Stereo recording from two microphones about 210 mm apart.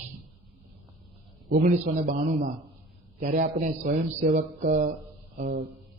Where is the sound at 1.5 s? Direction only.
45° right (ahead or behind).